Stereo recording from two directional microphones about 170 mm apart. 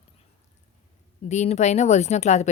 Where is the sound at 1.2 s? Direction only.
40° left (ahead or behind).